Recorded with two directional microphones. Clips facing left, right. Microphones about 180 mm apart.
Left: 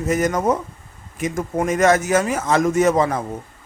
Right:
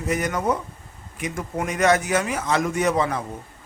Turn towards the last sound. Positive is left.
turn(degrees=45)  # may be behind; listen again after turning